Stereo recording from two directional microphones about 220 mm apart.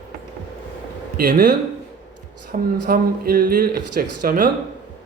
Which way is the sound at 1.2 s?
40° right (ahead or behind).